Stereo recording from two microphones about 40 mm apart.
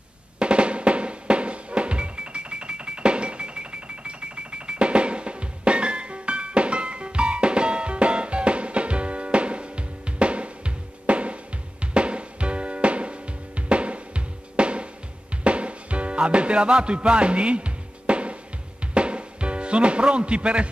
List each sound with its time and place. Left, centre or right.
0.4 s drum: right
11.8 s music: right